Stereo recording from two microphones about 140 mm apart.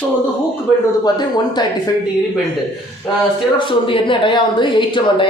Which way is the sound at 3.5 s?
35° left (ahead or behind).